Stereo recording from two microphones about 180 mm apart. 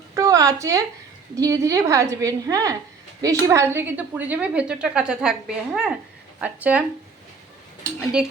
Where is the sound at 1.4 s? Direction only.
20° right (ahead or behind).